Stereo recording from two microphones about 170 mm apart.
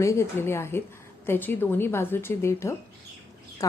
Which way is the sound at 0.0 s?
15° left (ahead or behind).